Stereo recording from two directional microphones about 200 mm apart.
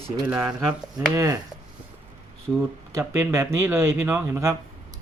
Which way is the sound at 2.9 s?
10° right (ahead or behind).